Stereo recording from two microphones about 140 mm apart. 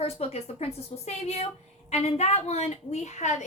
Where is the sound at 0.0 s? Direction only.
45° left (ahead or behind).